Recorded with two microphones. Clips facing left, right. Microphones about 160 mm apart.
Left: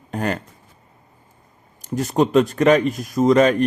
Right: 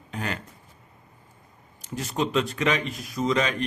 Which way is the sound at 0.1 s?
45° left (ahead or behind).